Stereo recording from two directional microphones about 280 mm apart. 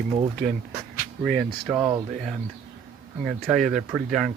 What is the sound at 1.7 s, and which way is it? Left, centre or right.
Speech, centre.